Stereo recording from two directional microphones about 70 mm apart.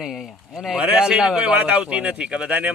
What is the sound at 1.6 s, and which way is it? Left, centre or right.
Speech, centre.